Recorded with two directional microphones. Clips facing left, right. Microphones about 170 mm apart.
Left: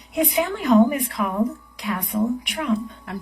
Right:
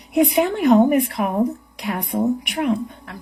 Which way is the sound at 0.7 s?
35° right (ahead or behind).